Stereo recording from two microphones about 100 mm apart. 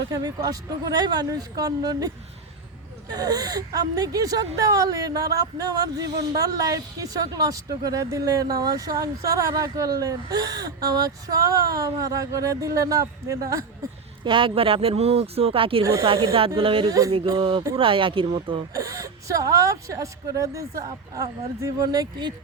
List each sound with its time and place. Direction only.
0.1 s speech: 40° right (ahead or behind)
14.3 s speech: 60° right (ahead or behind)
15.8 s speech: 35° right (ahead or behind)
16.6 s speech: 60° right (ahead or behind)
18.7 s speech: 35° right (ahead or behind)